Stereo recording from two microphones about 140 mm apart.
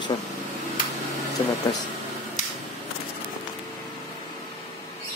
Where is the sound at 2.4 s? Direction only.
60° left (ahead or behind).